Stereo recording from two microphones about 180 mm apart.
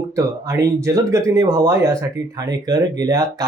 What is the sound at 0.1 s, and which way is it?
Speech, 15° right (ahead or behind).